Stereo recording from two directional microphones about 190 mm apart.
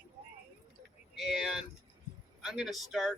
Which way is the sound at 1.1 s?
Centre (ahead or behind).